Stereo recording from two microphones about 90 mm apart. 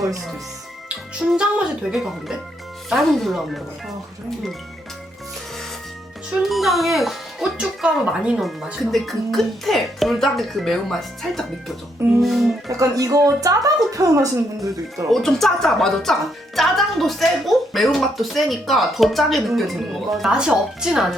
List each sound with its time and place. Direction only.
0.9 s speech: 10° right (ahead or behind)
6.3 s speech: centre (ahead or behind)
8.4 s speech: centre (ahead or behind)
12.6 s speech: 35° right (ahead or behind)
14.9 s speech: 5° left (ahead or behind)